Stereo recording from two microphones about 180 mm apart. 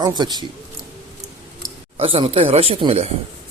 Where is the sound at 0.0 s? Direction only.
25° right (ahead or behind).